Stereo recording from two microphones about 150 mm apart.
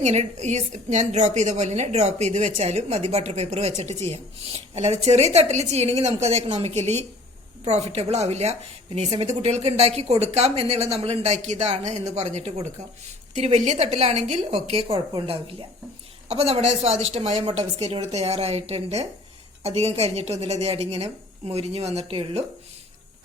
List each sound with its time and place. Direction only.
0.0 s a woman's voice: 50° right (ahead or behind)